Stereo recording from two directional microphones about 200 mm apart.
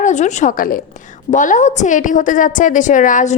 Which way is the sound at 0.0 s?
35° left (ahead or behind).